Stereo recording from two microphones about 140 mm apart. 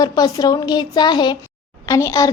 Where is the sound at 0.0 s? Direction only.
30° left (ahead or behind).